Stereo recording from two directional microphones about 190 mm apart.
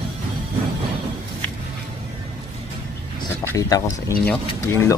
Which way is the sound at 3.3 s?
15° left (ahead or behind).